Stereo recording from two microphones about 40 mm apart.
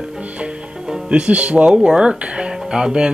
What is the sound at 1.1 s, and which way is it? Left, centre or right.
Speech, right.